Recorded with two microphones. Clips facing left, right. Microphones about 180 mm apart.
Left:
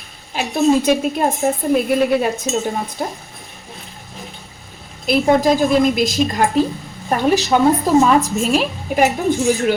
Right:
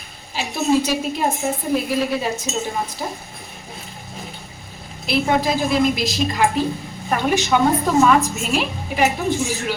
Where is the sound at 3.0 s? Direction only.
50° left (ahead or behind).